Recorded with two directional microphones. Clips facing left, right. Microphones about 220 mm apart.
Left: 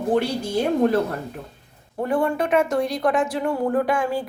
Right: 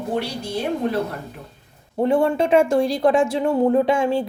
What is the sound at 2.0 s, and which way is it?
Speech, 25° right (ahead or behind).